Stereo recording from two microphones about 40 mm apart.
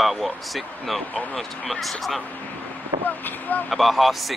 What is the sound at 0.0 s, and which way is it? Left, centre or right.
Speech, centre.